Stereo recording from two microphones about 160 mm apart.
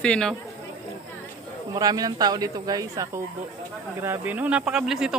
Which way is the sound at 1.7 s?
25° right (ahead or behind).